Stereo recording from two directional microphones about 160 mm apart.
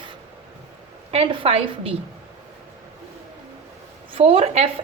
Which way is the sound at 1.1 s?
35° right (ahead or behind).